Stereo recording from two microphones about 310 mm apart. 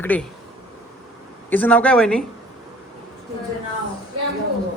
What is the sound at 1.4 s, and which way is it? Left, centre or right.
Speech, centre.